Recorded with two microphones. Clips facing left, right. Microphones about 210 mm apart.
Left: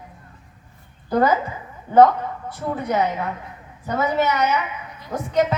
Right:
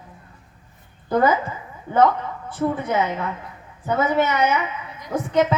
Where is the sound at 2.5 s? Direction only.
50° right (ahead or behind).